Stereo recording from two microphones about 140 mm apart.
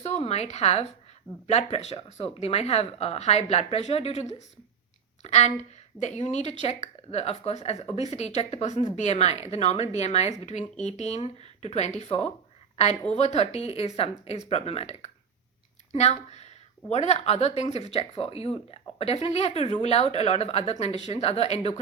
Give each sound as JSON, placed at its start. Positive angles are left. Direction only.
{"t": 0.0, "sound": "a woman's voice", "side_deg": 50}